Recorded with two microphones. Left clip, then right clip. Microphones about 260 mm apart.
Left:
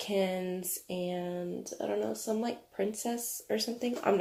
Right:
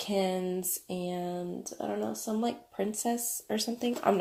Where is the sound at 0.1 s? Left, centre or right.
Right.